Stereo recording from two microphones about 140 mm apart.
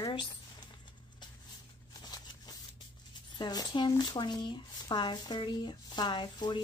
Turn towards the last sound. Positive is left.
turn(degrees=35)  # may be behind; listen again after turning